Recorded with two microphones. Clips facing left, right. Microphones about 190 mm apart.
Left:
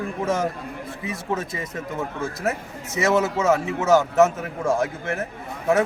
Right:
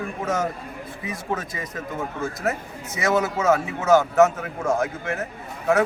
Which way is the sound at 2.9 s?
25° left (ahead or behind).